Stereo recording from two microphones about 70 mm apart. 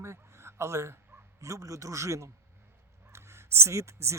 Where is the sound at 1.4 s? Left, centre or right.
Right.